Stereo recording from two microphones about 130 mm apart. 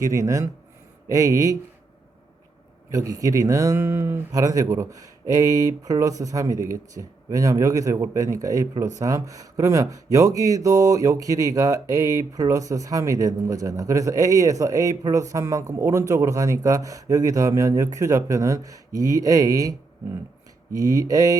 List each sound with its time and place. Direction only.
0.0 s speech: 25° right (ahead or behind)
2.9 s speech: 25° right (ahead or behind)
20.7 s speech: 25° right (ahead or behind)